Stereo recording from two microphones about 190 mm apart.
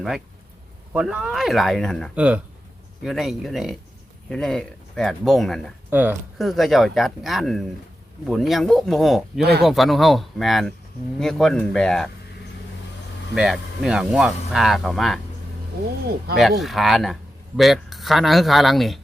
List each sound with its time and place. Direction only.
0.9 s speech: 5° right (ahead or behind)
5.9 s speech: 10° right (ahead or behind)
9.4 s speech: 60° right (ahead or behind)
9.6 s speech: centre (ahead or behind)
13.3 s speech: 5° right (ahead or behind)
16.4 s speech: centre (ahead or behind)